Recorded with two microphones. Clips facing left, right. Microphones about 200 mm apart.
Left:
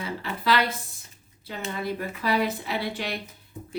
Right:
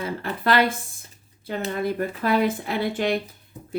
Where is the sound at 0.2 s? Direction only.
50° right (ahead or behind).